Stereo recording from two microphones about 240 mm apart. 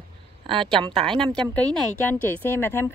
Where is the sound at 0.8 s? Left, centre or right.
Right.